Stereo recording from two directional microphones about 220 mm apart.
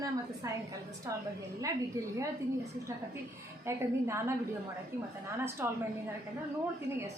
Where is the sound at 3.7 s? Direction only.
10° right (ahead or behind).